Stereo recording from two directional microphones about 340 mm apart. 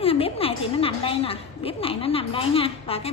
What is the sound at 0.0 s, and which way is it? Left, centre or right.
A woman's voice, centre.